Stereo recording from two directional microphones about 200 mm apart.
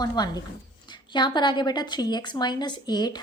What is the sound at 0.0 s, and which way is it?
A woman's voice, 20° left (ahead or behind).